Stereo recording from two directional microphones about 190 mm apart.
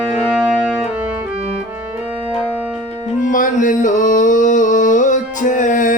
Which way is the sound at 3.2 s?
45° left (ahead or behind).